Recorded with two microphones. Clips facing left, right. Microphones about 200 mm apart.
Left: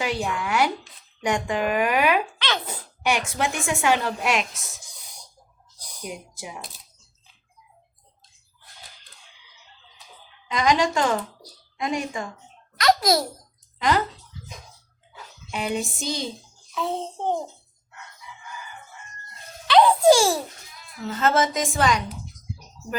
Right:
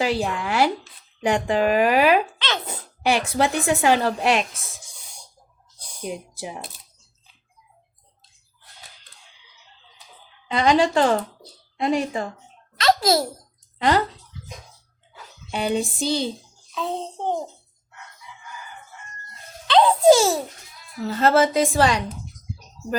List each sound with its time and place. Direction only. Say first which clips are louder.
0.0 s a woman's voice: right 3 dB; 30° right (ahead or behind)
5.8 s speech: right 4 dB; 30° right (ahead or behind)
10.5 s a child's voice: right 3 dB; 30° right (ahead or behind)
15.5 s a woman's voice: right 4 dB; 30° right (ahead or behind)
16.7 s a child's voice: even; 15° right (ahead or behind)
19.6 s babbling: right 1 dB; 20° right (ahead or behind)
21.0 s a woman's voice: right 4 dB; 35° right (ahead or behind)